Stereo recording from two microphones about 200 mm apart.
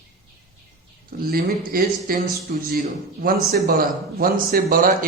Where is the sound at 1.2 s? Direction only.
45° right (ahead or behind).